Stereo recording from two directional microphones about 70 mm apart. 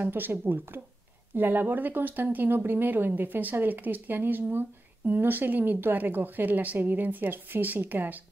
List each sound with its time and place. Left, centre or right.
0.0 s speech: right